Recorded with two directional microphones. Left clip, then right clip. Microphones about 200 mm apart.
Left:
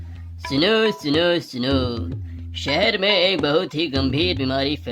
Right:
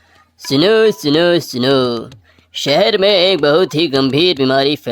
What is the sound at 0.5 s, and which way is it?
Speech, 45° right (ahead or behind).